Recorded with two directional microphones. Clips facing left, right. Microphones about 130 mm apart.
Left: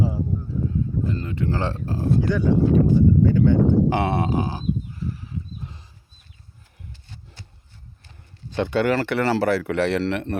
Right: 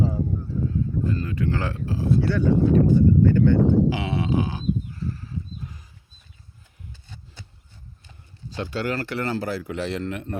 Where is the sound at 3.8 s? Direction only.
55° left (ahead or behind); by 4.6 s 35° left (ahead or behind).